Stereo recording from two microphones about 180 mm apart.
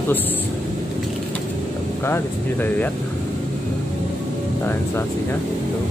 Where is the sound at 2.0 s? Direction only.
10° left (ahead or behind).